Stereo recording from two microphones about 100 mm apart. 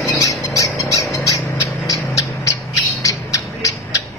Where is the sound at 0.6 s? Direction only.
35° left (ahead or behind).